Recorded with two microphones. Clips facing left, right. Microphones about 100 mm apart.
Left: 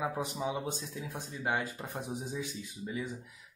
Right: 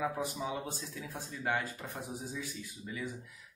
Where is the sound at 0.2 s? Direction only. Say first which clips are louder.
Left 2 dB; 20° left (ahead or behind).